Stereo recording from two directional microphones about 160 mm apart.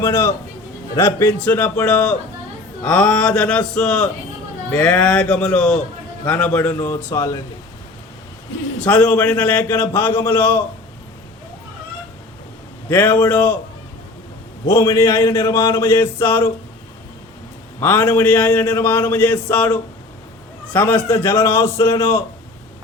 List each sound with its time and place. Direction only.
0.0 s a man's voice: 15° left (ahead or behind)
8.8 s a man's voice: 10° left (ahead or behind)
12.9 s a man's voice: 10° left (ahead or behind)
14.7 s a man's voice: 15° left (ahead or behind)
17.7 s a man's voice: 15° left (ahead or behind)